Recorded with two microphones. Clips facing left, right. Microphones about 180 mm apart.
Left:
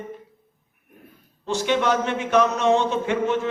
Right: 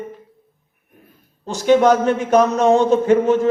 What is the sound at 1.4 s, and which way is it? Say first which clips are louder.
A man's voice: right 8 dB; 40° right (ahead or behind).